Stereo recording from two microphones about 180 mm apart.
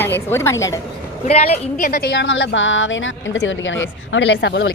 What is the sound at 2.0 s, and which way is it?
A woman's voice, 85° left.